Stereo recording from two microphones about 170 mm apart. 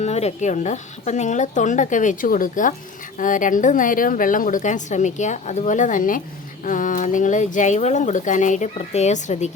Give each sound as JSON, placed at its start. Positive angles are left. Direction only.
{"t": 0.0, "sound": "a woman's voice", "side_deg": 40}